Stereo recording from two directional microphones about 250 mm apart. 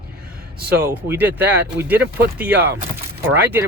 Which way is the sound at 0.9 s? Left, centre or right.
Centre.